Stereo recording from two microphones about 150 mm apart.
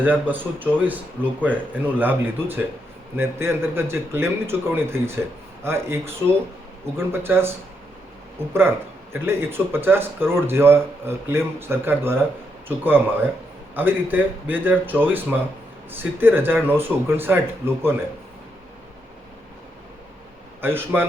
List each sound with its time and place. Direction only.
0.0 s speech: 10° right (ahead or behind)
7.1 s speech: 15° right (ahead or behind)
20.6 s speech: 15° right (ahead or behind)